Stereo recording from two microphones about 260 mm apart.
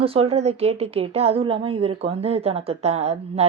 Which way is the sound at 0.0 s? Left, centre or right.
Right.